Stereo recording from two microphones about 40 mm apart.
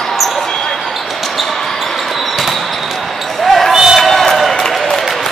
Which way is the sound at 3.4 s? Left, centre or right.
Centre.